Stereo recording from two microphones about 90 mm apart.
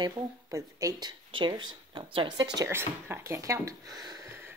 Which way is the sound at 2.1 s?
70° right (ahead or behind).